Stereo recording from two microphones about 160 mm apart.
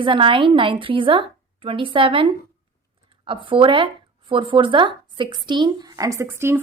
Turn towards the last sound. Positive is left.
turn(degrees=-15)  # may be behind; listen again after turning